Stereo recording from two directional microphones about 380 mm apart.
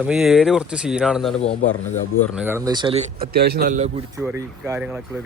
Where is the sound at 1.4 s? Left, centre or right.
Centre.